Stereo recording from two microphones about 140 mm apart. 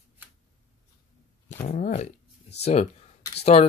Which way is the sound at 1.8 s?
70° left (ahead or behind).